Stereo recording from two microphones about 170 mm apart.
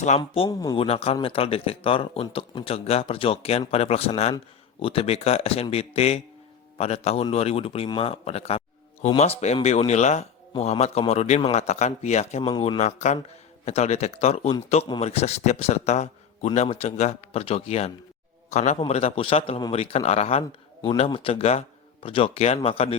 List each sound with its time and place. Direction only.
0.2 s a man's voice: 25° left (ahead or behind); by 12.4 s 40° left (ahead or behind)
12.4 s a man's voice: 30° left (ahead or behind)